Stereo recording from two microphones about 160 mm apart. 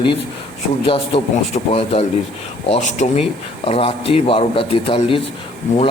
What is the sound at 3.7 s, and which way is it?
A man's voice, 35° left (ahead or behind).